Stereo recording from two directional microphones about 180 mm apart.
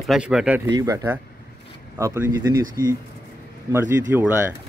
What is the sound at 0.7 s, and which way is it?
Speech, 20° right (ahead or behind).